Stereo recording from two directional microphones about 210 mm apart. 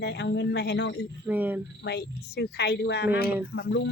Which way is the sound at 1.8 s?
50° left (ahead or behind).